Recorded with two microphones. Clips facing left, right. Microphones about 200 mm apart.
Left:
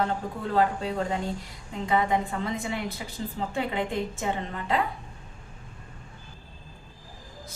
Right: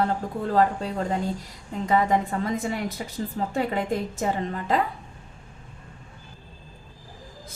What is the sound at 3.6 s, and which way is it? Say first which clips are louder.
Speech: right 3 dB; 40° right (ahead or behind).